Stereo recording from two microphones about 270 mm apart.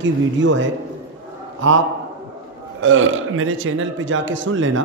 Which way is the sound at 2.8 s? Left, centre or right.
Right.